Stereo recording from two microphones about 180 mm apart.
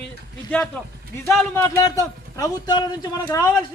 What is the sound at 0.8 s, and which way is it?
Speech, 5° left (ahead or behind).